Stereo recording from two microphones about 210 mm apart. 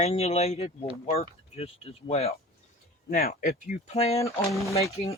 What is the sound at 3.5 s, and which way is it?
Speech, 30° left (ahead or behind).